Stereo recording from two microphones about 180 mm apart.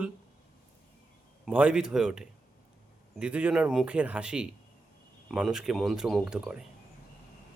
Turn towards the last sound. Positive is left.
turn(degrees=-5)  # may be behind; listen again after turning